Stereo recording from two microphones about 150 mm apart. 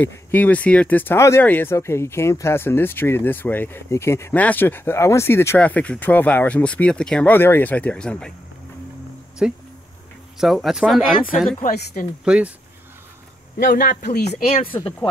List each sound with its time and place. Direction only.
0.0 s speech: 10° left (ahead or behind)
9.4 s speech: 5° right (ahead or behind)
11.6 s speech: 65° left (ahead or behind)
12.3 s speech: 10° right (ahead or behind)
13.7 s speech: 70° left (ahead or behind); by 14.6 s 45° left (ahead or behind)